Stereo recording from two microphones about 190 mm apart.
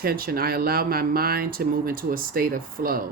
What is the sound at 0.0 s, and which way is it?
Speech, 55° right (ahead or behind).